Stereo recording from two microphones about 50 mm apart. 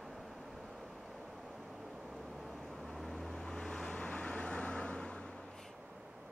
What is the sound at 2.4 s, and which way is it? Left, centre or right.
Vehicle, centre.